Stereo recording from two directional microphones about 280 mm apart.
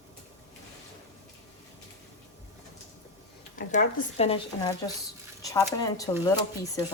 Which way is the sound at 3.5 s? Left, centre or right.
Left.